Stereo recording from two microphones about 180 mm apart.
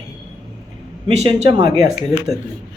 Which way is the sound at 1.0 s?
30° right (ahead or behind).